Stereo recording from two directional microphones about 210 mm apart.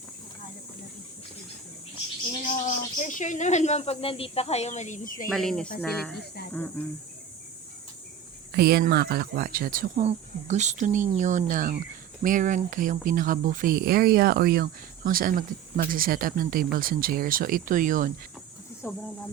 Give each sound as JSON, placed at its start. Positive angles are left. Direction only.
{"t": 2.4, "sound": "speech", "side_deg": 40}
{"t": 5.3, "sound": "speech", "side_deg": 0}
{"t": 8.5, "sound": "speech", "side_deg": -50}
{"t": 18.8, "sound": "speech", "side_deg": 10}